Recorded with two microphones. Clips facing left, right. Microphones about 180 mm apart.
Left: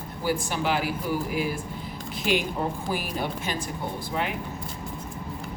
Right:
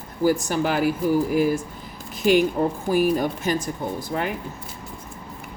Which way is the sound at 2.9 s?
45° right (ahead or behind).